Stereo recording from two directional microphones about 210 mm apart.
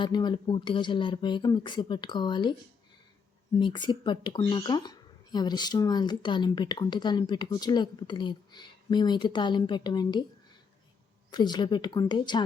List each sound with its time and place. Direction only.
0.0 s speech: 20° left (ahead or behind)
3.6 s speech: 20° left (ahead or behind)
11.3 s speech: 20° left (ahead or behind)